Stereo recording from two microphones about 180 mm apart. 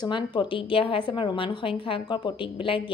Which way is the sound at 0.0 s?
25° left (ahead or behind).